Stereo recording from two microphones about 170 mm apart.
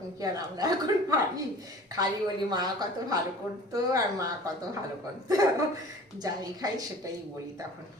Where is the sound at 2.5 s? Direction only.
25° right (ahead or behind).